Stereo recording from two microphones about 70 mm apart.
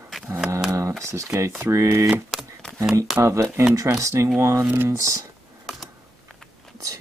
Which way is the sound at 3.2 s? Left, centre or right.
Right.